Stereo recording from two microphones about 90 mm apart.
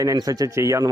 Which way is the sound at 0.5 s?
35° right (ahead or behind).